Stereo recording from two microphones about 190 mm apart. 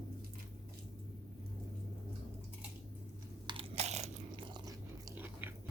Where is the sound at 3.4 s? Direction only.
30° right (ahead or behind).